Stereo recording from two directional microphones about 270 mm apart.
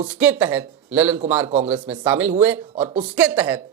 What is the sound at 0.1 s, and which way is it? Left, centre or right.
A man's voice, centre.